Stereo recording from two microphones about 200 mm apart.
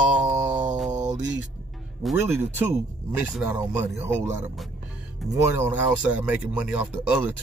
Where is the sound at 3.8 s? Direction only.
15° right (ahead or behind).